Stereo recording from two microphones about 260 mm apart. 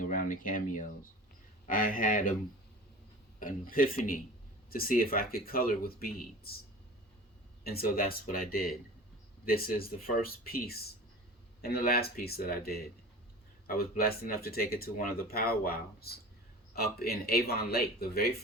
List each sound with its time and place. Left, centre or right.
0.0 s speech: left
3.4 s speech: left
7.6 s speech: left